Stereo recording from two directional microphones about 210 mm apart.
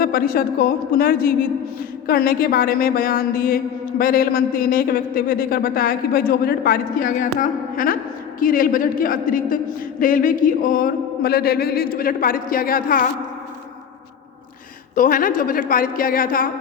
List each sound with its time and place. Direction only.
0.0 s a woman's voice: 45° left (ahead or behind)
14.9 s a woman's voice: 40° left (ahead or behind)